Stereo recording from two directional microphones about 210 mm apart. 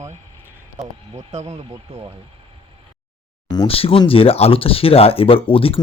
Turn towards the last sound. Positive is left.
turn(degrees=25)  # may be behind; listen again after turning